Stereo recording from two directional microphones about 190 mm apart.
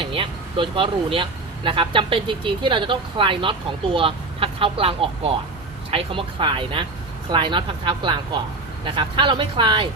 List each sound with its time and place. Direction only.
0.0 s speech: 25° right (ahead or behind)